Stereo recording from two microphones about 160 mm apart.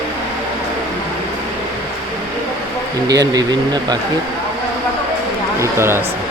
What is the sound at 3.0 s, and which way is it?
Speech, 25° right (ahead or behind).